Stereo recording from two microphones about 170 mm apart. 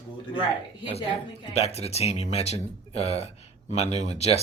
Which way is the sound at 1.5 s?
40° left (ahead or behind).